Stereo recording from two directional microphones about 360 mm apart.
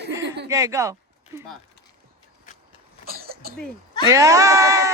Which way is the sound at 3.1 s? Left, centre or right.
Right.